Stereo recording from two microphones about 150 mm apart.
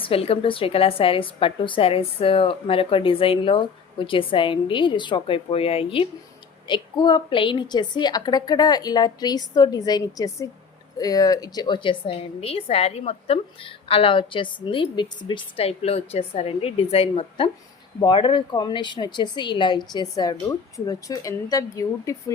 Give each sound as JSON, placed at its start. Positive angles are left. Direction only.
{"t": 0.0, "sound": "a woman's voice", "side_deg": 40}